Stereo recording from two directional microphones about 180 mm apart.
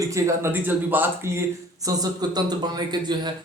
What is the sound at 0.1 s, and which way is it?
Speech, 15° right (ahead or behind).